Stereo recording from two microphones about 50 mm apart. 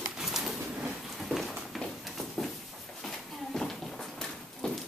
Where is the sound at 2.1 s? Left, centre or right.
Centre.